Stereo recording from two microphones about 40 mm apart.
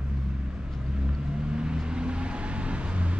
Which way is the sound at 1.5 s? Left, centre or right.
Right.